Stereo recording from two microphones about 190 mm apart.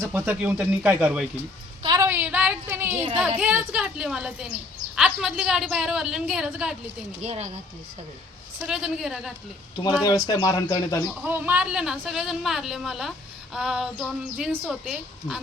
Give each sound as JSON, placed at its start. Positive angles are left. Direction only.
{"t": 0.0, "sound": "speech", "side_deg": -10}
{"t": 1.8, "sound": "a sound", "side_deg": -20}
{"t": 2.0, "sound": "a sound", "side_deg": -10}
{"t": 3.2, "sound": "speech", "side_deg": -10}
{"t": 7.2, "sound": "speech", "side_deg": -35}
{"t": 8.6, "sound": "speech", "side_deg": -5}
{"t": 10.0, "sound": "speech", "side_deg": 20}
{"t": 11.0, "sound": "speech", "side_deg": -5}